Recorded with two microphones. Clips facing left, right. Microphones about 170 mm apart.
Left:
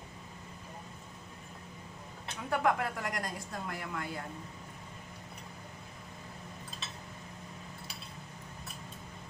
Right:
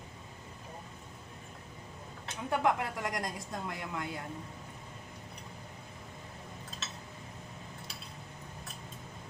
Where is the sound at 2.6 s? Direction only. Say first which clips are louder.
Even; 20° right (ahead or behind).